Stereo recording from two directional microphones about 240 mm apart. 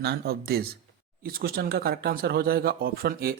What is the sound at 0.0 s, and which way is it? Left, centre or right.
Speech, right.